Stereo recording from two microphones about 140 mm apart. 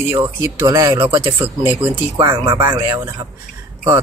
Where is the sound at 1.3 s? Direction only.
15° right (ahead or behind).